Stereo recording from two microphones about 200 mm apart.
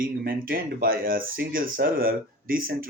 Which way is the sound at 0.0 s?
45° right (ahead or behind).